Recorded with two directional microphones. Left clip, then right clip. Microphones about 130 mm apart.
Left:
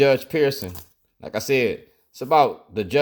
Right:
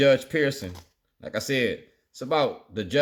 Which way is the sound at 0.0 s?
35° left (ahead or behind).